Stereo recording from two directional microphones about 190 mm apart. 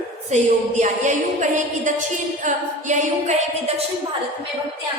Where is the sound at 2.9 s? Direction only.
40° right (ahead or behind).